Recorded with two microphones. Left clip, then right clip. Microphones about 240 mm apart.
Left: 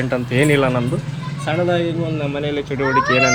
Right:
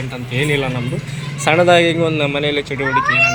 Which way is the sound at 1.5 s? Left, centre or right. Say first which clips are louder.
Right 7 dB; right.